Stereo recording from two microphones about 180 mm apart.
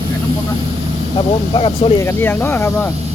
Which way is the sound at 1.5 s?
30° left (ahead or behind).